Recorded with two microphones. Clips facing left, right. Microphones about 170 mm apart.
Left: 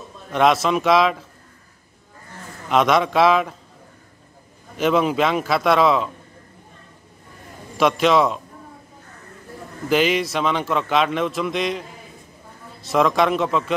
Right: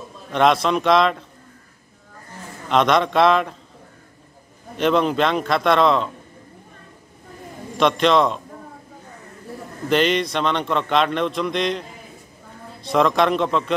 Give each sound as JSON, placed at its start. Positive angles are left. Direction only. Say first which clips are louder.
{"t": 0.3, "sound": "a man's voice", "louder": "even", "side_deg": 5}
{"t": 2.7, "sound": "a man's voice", "louder": "even", "side_deg": 5}
{"t": 4.7, "sound": "a man's voice", "louder": "even", "side_deg": 5}
{"t": 7.7, "sound": "a man's voice", "louder": "even", "side_deg": 5}
{"t": 9.8, "sound": "a man's voice", "louder": "even", "side_deg": 5}
{"t": 12.8, "sound": "a man's voice", "louder": "even", "side_deg": 5}